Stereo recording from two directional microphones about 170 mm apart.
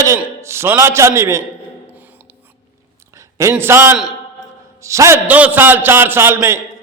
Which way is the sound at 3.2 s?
15° right (ahead or behind).